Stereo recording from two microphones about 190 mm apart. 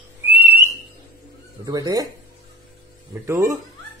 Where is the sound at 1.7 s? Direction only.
20° right (ahead or behind).